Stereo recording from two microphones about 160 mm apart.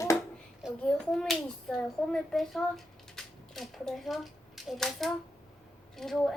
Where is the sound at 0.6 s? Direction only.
5° right (ahead or behind).